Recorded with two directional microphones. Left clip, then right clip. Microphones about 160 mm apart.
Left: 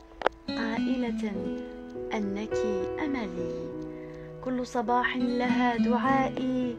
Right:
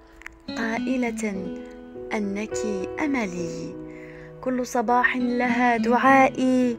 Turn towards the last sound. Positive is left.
turn(degrees=-65)  # may be behind; listen again after turning